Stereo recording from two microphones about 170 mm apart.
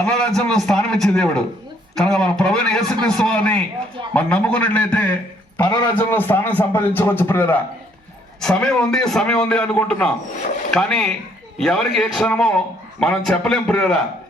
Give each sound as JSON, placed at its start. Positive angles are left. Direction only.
{"t": 0.0, "sound": "a man's voice", "side_deg": 5}